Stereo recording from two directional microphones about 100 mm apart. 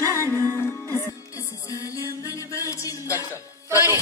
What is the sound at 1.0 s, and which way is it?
Music, 35° left (ahead or behind).